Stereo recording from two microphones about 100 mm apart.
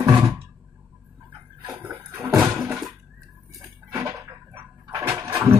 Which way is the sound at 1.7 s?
20° right (ahead or behind).